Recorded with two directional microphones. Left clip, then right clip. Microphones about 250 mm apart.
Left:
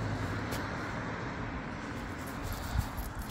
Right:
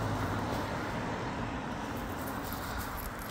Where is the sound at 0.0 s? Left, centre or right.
Right.